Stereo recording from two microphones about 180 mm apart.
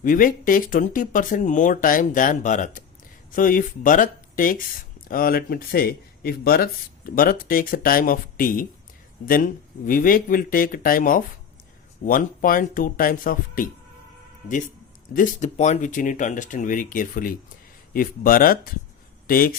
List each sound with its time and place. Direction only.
0.0 s speech: 50° left (ahead or behind)
15.1 s speech: 45° left (ahead or behind)